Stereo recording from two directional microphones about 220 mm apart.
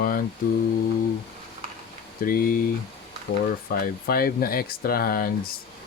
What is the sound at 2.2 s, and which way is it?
Speech, 40° left (ahead or behind).